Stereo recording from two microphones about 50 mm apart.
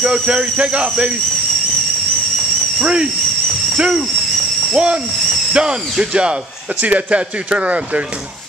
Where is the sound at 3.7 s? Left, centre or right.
Centre.